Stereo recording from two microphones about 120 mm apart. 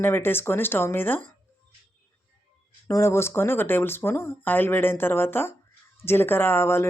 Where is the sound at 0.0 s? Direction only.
20° left (ahead or behind).